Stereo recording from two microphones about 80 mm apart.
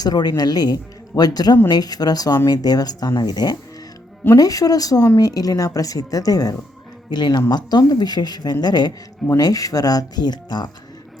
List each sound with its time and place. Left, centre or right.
0.0 s speech: left
7.1 s speech: left
9.4 s speech: left